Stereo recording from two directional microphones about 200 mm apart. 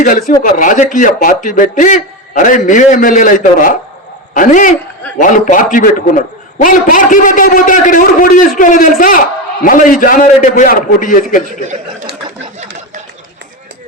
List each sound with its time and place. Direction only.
0.0 s a man's voice: 40° left (ahead or behind)